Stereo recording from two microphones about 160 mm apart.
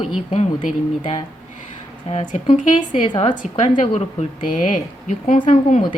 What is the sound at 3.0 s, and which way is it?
A woman's voice, 35° left (ahead or behind).